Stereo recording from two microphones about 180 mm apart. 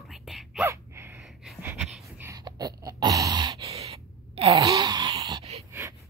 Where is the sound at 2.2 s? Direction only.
15° right (ahead or behind).